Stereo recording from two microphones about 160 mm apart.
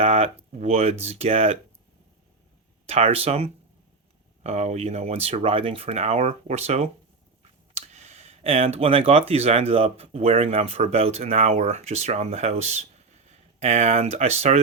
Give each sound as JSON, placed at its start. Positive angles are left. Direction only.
{"t": 0.0, "sound": "speech", "side_deg": -40}
{"t": 2.8, "sound": "speech", "side_deg": -40}